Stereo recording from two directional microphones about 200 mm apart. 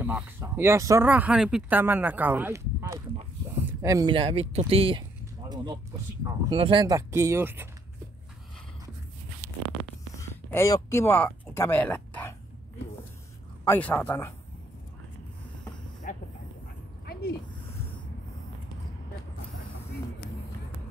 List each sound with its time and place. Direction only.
0.0 s speech: 10° right (ahead or behind); by 5.0 s 25° right (ahead or behind)
5.5 s a sound: 20° right (ahead or behind)
6.2 s speech: 25° right (ahead or behind)
10.1 s speech: 10° left (ahead or behind)
13.7 s speech: 10° left (ahead or behind)
17.0 s a sound: 50° left (ahead or behind)